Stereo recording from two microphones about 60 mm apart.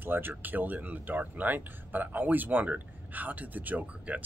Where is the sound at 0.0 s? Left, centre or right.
Right.